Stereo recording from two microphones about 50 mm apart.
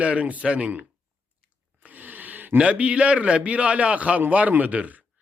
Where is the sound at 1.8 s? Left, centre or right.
Right.